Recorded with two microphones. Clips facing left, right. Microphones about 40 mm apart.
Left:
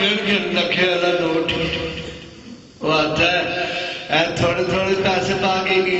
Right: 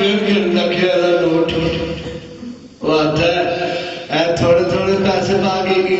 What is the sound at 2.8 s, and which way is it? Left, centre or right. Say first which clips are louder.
Speech: right 3 dB; left.